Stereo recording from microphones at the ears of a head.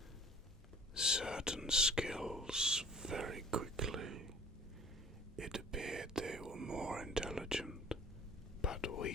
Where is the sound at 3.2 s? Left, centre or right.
Right.